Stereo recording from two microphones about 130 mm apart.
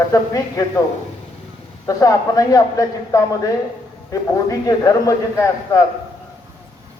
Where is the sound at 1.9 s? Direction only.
25° left (ahead or behind).